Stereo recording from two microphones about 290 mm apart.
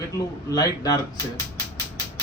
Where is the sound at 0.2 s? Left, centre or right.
Centre.